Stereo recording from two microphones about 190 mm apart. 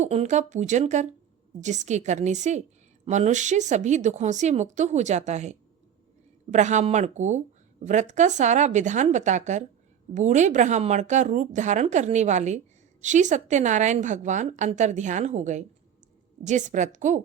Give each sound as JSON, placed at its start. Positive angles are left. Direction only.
{"t": 0.0, "sound": "a woman's voice", "side_deg": -35}